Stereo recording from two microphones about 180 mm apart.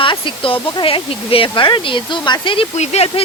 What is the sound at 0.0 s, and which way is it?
Speech, 30° left (ahead or behind).